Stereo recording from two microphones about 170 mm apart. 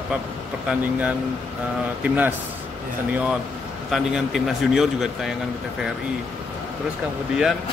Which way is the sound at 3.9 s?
5° right (ahead or behind).